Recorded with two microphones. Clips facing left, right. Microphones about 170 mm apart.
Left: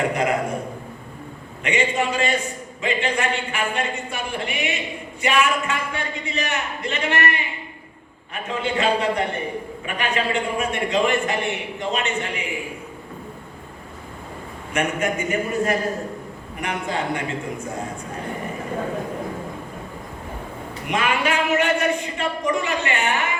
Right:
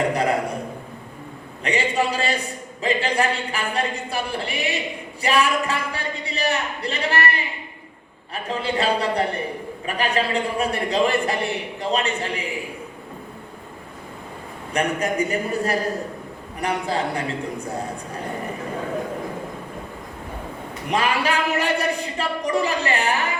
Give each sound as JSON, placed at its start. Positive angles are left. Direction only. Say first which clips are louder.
{"t": 0.1, "sound": "a man's voice", "louder": "right 1 dB", "side_deg": -35}
{"t": 1.6, "sound": "a man's voice", "louder": "even", "side_deg": -35}
{"t": 8.4, "sound": "a man's voice", "louder": "left 1 dB", "side_deg": -35}
{"t": 14.7, "sound": "a man's voice", "louder": "even", "side_deg": -35}
{"t": 20.9, "sound": "a man's voice", "louder": "even", "side_deg": -35}